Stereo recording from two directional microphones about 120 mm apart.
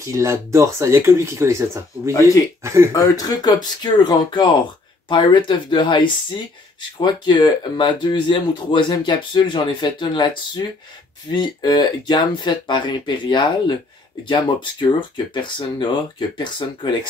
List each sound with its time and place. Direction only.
0.0 s speech: 25° right (ahead or behind)
2.1 s speech: 25° left (ahead or behind)
2.6 s speech: 25° right (ahead or behind)
2.9 s speech: 30° left (ahead or behind)